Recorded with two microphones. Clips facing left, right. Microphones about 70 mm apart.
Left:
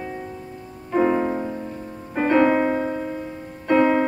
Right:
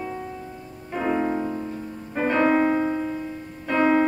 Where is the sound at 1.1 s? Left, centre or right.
Centre.